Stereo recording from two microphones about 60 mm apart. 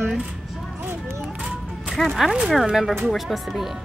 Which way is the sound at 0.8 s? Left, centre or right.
Right.